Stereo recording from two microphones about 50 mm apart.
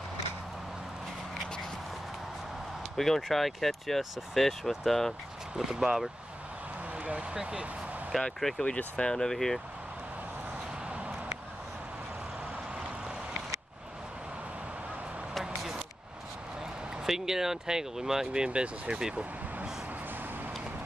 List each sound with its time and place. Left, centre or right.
3.0 s speech: centre
5.7 s speech: centre
7.0 s speech: right
8.4 s speech: centre
8.6 s speech: left
10.9 s a sound: right
15.4 s vehicle: centre
17.0 s speech: centre